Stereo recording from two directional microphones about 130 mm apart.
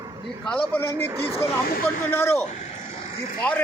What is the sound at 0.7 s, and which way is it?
A man's voice, 15° left (ahead or behind).